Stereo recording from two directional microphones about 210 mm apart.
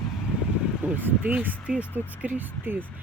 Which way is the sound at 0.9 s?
10° right (ahead or behind).